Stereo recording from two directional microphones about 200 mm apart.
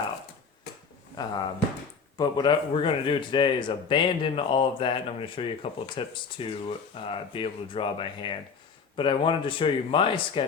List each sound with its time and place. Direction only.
1.1 s a man's voice: 20° left (ahead or behind)